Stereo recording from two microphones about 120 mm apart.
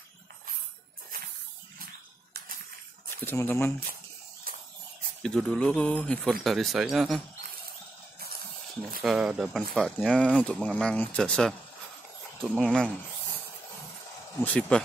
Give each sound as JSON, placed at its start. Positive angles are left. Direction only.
{"t": 3.3, "sound": "speech", "side_deg": 20}
{"t": 5.2, "sound": "speech", "side_deg": 5}
{"t": 9.0, "sound": "speech", "side_deg": -10}
{"t": 10.1, "sound": "speech", "side_deg": 10}
{"t": 12.5, "sound": "speech", "side_deg": 5}
{"t": 14.4, "sound": "speech", "side_deg": 10}